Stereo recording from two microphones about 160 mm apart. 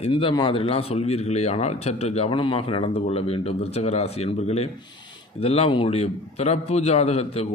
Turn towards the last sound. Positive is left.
turn(degrees=40)  # may be behind; listen again after turning